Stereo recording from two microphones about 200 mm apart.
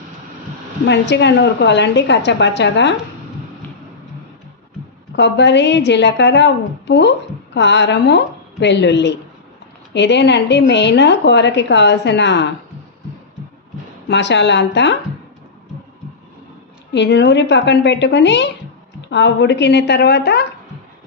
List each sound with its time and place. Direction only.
0.9 s a woman's voice: 60° left (ahead or behind)
5.1 s a woman's voice: 60° left (ahead or behind)
14.1 s a woman's voice: 60° left (ahead or behind)
16.9 s a woman's voice: 60° left (ahead or behind)